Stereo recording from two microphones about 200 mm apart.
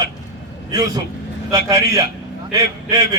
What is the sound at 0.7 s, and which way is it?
A man's voice, 20° right (ahead or behind).